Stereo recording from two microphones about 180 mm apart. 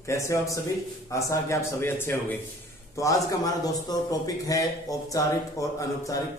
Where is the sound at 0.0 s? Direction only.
15° left (ahead or behind).